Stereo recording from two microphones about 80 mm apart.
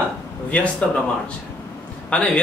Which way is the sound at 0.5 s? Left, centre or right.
Centre.